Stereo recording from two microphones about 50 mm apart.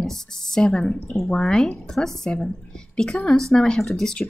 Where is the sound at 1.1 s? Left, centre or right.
Centre.